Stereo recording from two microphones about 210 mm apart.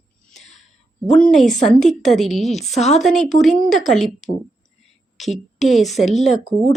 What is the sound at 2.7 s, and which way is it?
Speech, 30° left (ahead or behind).